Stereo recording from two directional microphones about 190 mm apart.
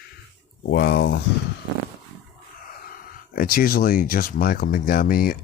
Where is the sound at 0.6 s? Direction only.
60° left (ahead or behind).